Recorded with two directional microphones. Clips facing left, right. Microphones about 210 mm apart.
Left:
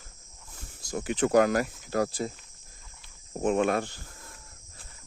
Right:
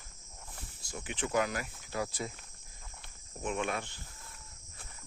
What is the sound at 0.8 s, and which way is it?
Speech, 40° left (ahead or behind).